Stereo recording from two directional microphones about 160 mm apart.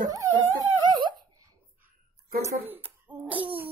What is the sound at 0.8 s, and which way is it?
Dog, 30° right (ahead or behind).